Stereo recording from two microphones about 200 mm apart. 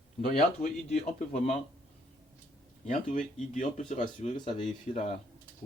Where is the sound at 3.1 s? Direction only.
40° left (ahead or behind).